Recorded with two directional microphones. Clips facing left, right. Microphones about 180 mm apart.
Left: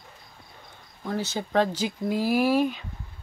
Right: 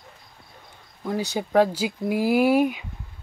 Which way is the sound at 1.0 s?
15° right (ahead or behind).